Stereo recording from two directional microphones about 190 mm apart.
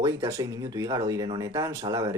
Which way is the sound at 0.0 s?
15° right (ahead or behind).